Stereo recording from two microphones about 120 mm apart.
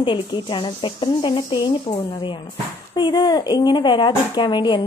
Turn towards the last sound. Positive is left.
turn(degrees=40)  # may be behind; listen again after turning